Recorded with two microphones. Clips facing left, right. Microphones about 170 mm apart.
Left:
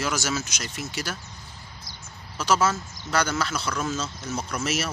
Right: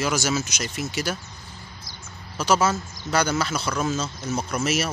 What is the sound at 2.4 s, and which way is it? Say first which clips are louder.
Speech: right 2 dB; 10° right (ahead or behind).